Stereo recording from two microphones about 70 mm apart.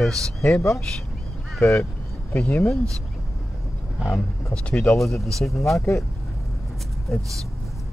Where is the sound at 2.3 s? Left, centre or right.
Left.